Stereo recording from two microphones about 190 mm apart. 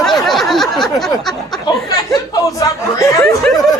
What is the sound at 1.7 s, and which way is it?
Speech, 20° left (ahead or behind).